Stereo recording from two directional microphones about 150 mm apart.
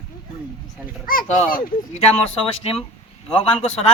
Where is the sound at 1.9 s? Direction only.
45° left (ahead or behind).